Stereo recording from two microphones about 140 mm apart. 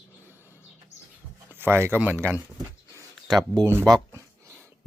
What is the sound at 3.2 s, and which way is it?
Speech, centre (ahead or behind).